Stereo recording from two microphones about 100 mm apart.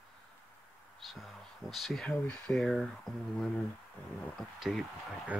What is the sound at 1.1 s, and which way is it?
Speech, centre (ahead or behind).